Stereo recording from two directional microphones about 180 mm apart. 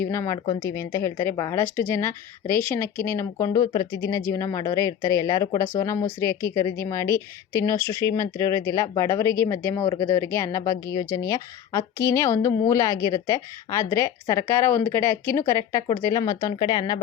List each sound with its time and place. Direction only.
0.0 s a woman's voice: 15° left (ahead or behind)